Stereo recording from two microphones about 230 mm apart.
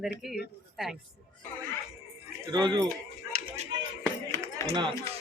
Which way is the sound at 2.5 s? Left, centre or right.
Centre.